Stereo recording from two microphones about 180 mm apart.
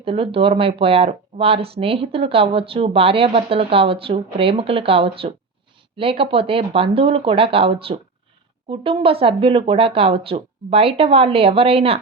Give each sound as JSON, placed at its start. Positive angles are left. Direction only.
{"t": 0.0, "sound": "speech", "side_deg": -30}